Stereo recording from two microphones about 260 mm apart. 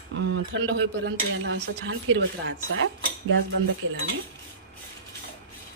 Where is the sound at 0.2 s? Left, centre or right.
Right.